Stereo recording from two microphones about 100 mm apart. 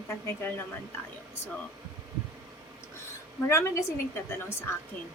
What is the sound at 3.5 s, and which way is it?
A woman's voice, 25° left (ahead or behind).